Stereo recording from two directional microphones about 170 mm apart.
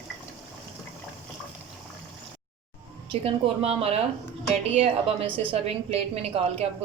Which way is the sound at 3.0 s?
35° right (ahead or behind).